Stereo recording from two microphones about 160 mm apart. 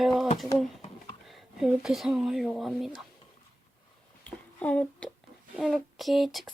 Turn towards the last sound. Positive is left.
turn(degrees=0)  # may be behind; listen again after turning